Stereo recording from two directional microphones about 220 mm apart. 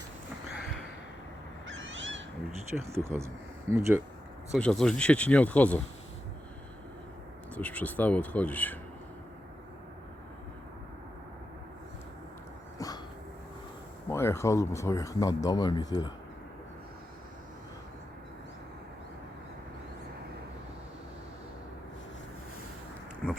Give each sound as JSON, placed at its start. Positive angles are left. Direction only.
{"t": 1.6, "sound": "owl", "side_deg": -60}
{"t": 2.7, "sound": "speech", "side_deg": -10}
{"t": 4.5, "sound": "speech", "side_deg": 0}
{"t": 7.5, "sound": "speech", "side_deg": 5}
{"t": 12.8, "sound": "dog", "side_deg": 15}
{"t": 14.1, "sound": "speech", "side_deg": 10}
{"t": 23.2, "sound": "a sound", "side_deg": 0}